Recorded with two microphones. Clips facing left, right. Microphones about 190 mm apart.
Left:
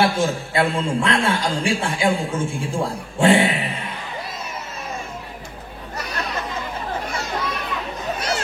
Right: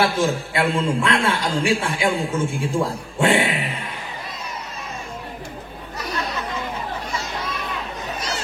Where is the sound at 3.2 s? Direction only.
30° left (ahead or behind).